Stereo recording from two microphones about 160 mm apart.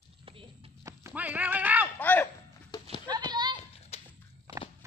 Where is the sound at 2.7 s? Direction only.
25° left (ahead or behind).